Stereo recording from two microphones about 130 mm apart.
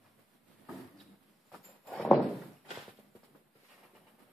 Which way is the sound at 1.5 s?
5° left (ahead or behind).